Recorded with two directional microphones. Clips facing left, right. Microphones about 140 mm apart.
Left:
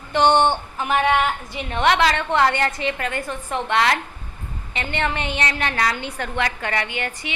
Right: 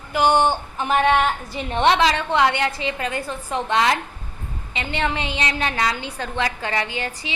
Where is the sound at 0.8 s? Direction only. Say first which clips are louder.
Right 2 dB; 25° right (ahead or behind).